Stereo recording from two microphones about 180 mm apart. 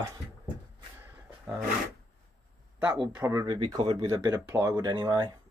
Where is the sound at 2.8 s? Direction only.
25° right (ahead or behind).